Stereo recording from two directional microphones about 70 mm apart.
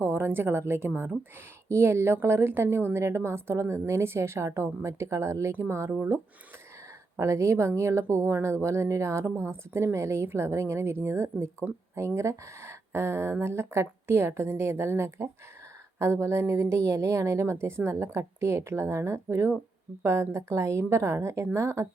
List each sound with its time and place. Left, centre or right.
0.0 s a woman's voice: right
7.2 s a woman's voice: right